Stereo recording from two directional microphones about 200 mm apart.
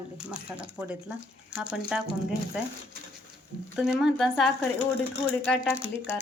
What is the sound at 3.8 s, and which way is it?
Speech, 5° right (ahead or behind).